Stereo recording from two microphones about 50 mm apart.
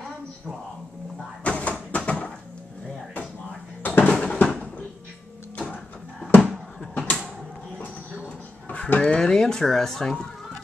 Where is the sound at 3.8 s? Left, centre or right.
Left.